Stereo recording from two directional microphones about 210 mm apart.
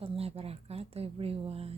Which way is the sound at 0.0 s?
30° right (ahead or behind).